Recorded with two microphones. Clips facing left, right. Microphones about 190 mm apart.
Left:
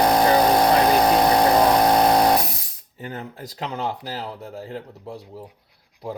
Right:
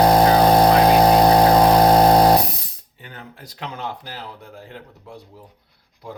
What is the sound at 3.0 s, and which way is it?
Speech, 40° left (ahead or behind).